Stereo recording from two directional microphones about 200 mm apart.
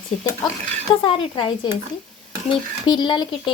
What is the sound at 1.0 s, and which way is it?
Speech, 25° left (ahead or behind).